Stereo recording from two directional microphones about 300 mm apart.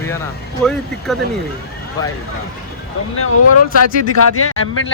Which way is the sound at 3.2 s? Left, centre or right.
Left.